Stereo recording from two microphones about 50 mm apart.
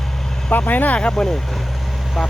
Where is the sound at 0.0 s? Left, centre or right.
Centre.